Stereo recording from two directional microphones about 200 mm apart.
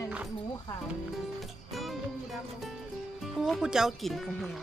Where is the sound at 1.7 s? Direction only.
Centre (ahead or behind).